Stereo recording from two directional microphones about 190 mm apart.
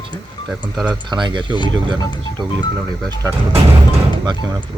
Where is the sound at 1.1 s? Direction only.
25° right (ahead or behind).